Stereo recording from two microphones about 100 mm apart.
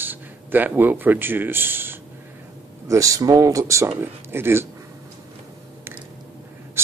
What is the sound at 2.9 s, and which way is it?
Speech, 35° right (ahead or behind).